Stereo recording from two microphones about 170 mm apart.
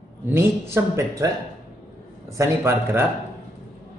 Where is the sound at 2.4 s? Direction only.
15° right (ahead or behind).